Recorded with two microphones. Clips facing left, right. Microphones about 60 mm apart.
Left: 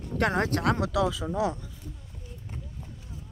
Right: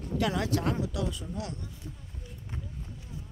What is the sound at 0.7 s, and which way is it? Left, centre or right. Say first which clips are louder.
Speech: left 5 dB; left.